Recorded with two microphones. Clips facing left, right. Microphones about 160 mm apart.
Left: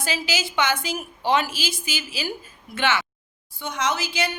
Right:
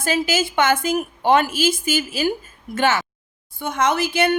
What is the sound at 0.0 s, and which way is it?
A woman's voice, 50° right (ahead or behind).